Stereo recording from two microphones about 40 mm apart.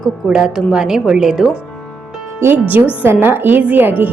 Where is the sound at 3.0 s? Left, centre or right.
Right.